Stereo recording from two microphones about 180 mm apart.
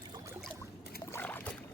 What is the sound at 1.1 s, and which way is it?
Boat, 10° left (ahead or behind).